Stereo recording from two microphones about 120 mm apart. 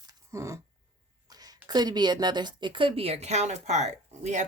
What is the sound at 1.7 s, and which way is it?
Speech, 35° right (ahead or behind).